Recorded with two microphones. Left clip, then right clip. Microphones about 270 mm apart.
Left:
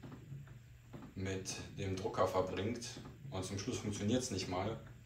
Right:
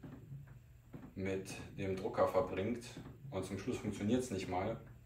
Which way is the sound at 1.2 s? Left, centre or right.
Centre.